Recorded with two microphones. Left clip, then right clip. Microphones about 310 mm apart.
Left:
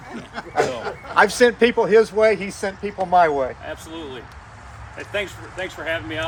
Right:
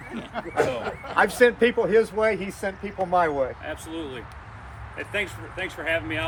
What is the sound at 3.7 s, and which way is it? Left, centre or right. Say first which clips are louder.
Speech: left 1 dB; centre.